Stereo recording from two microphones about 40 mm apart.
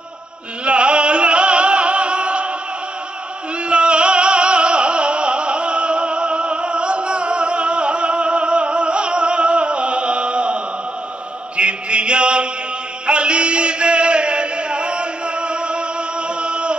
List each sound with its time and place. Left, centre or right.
0.7 s music: right
3.6 s music: right
11.5 s chant: right
13.0 s a sound: right
16.3 s music: right